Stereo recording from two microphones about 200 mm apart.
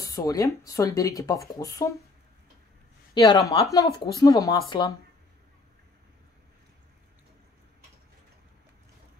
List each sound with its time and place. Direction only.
0.0 s speech: 15° left (ahead or behind)
3.2 s speech: 15° left (ahead or behind)